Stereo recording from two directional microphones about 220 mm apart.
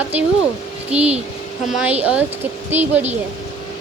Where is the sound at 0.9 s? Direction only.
30° right (ahead or behind).